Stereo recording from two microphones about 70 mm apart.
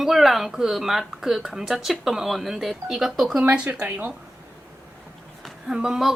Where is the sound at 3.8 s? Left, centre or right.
Centre.